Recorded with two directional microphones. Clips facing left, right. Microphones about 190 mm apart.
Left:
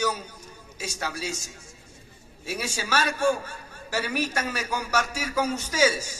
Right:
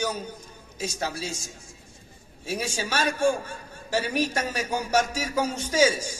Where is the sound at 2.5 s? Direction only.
10° left (ahead or behind).